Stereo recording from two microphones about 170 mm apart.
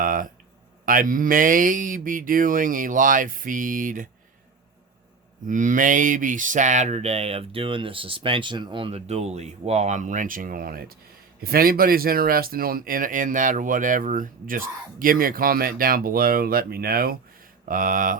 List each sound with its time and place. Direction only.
0.0 s a sound: 55° right (ahead or behind)
0.9 s speech: 55° right (ahead or behind)
5.5 s speech: 50° right (ahead or behind)
17.7 s speech: 55° right (ahead or behind)